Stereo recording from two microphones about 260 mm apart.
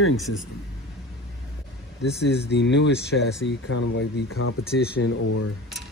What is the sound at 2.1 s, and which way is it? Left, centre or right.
Speech, left.